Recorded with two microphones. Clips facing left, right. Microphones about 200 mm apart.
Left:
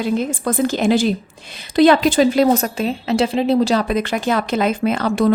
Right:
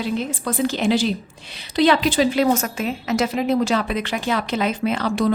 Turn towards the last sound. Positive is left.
turn(degrees=45)  # may be behind; listen again after turning